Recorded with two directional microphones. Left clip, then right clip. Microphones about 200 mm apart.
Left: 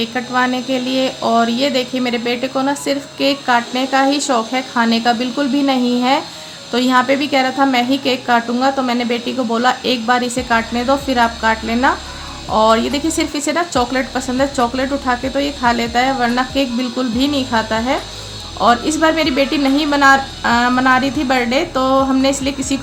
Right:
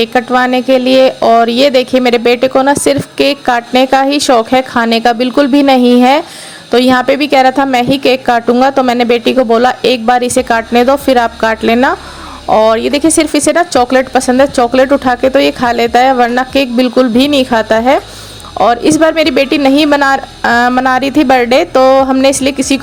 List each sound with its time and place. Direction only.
0.0 s speech: 45° right (ahead or behind)